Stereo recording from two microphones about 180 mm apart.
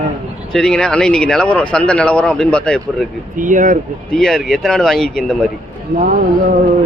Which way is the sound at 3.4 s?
45° right (ahead or behind).